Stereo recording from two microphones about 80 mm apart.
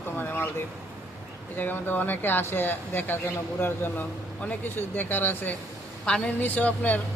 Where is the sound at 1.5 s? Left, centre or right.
Left.